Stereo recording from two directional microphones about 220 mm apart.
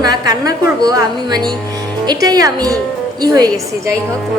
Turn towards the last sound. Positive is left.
turn(degrees=-15)  # may be behind; listen again after turning